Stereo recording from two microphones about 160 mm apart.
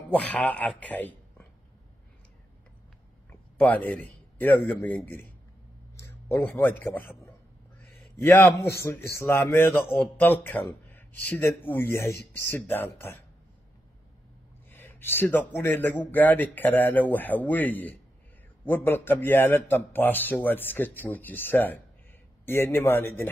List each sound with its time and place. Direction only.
0.1 s a man's voice: 10° left (ahead or behind)
3.3 s a sound: 10° left (ahead or behind)
4.6 s a man's voice: 10° left (ahead or behind)
14.7 s speech: 15° left (ahead or behind)